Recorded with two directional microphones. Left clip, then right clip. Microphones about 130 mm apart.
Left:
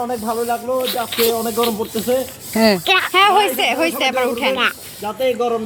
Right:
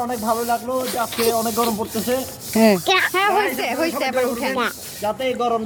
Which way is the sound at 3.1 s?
50° left (ahead or behind).